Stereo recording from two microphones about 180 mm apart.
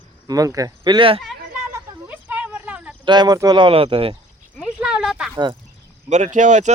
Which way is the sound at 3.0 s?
25° right (ahead or behind).